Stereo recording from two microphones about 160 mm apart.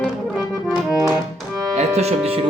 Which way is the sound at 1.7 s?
40° right (ahead or behind).